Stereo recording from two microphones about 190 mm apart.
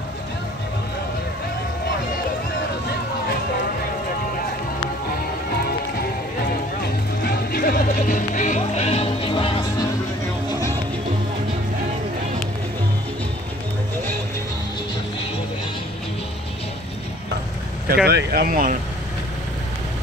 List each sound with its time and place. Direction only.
7.2 s music: 55° left (ahead or behind); by 9.8 s 25° left (ahead or behind)
17.8 s speech: 55° right (ahead or behind)